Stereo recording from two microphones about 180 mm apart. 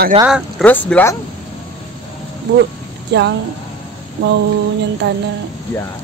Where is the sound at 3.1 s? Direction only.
70° right (ahead or behind).